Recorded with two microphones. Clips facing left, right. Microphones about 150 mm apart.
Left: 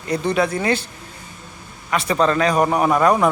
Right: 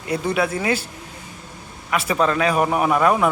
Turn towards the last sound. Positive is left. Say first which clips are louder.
# left 2 dB
turn(degrees=-5)  # may be behind; listen again after turning